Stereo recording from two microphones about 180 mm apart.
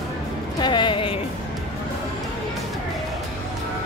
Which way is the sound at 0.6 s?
25° left (ahead or behind).